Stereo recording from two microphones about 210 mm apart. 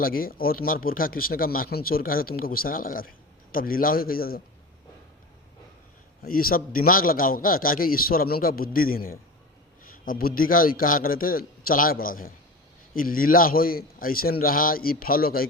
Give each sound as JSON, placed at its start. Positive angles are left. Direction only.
{"t": 0.0, "sound": "speech", "side_deg": 45}
{"t": 6.2, "sound": "speech", "side_deg": 45}